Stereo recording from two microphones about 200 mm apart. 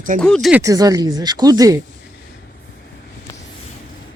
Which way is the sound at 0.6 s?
15° right (ahead or behind).